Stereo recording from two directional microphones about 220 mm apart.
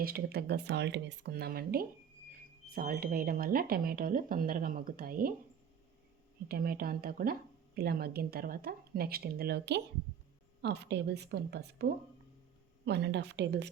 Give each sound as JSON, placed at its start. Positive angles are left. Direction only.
{"t": 0.0, "sound": "a woman's voice", "side_deg": -45}
{"t": 6.5, "sound": "a woman's voice", "side_deg": -40}